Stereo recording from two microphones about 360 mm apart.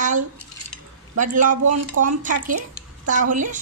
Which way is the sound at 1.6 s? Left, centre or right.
Right.